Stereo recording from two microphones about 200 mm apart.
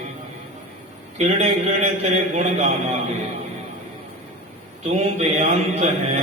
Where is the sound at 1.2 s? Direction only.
35° right (ahead or behind).